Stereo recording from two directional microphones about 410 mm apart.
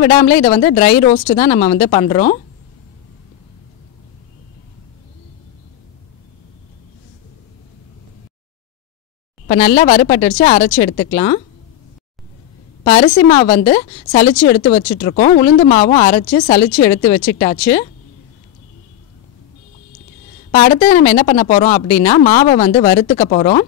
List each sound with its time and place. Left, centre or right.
0.0 s a woman's voice: left
9.5 s a woman's voice: centre
12.8 s a woman's voice: centre
20.6 s a woman's voice: centre